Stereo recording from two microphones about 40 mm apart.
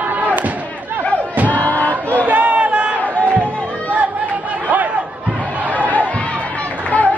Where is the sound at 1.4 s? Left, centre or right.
Left.